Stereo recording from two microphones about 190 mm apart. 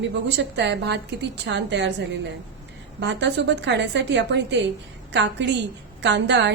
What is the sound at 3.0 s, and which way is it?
A woman's voice, 70° right (ahead or behind).